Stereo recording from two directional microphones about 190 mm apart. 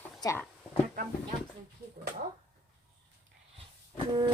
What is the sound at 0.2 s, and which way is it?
Speech, 15° left (ahead or behind).